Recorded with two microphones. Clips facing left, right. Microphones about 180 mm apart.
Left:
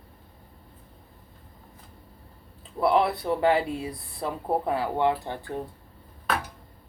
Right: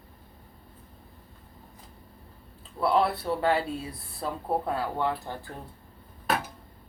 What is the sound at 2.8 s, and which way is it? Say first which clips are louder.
Speech: left 2 dB; 20° left (ahead or behind).